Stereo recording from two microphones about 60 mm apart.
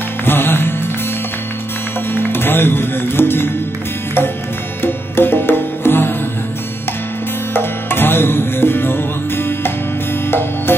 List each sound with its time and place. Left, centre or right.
0.2 s music: left
2.1 s music: left
4.8 s music: left
7.5 s music: left
10.7 s music: left